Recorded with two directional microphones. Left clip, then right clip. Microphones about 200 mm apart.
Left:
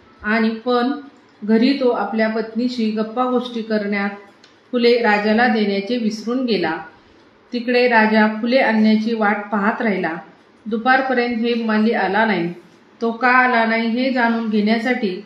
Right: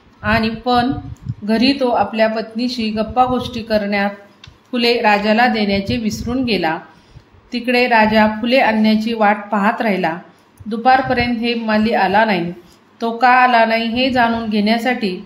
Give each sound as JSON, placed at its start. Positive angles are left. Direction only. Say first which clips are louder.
{"t": 0.2, "sound": "a woman's voice", "louder": "right 2 dB", "side_deg": -45}
{"t": 2.1, "sound": "a woman's voice", "louder": "right 3 dB", "side_deg": -45}